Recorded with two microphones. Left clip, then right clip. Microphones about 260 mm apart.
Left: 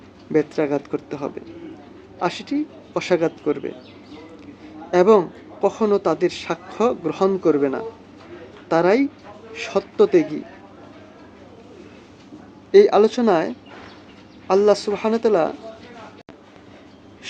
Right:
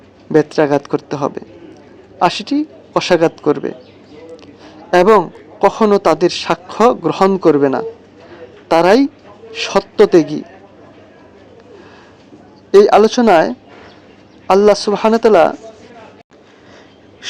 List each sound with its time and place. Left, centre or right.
0.3 s a woman's voice: right
12.7 s a woman's voice: right